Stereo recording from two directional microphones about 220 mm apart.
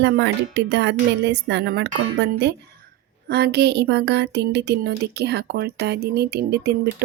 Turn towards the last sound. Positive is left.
turn(degrees=-45)  # may be behind; listen again after turning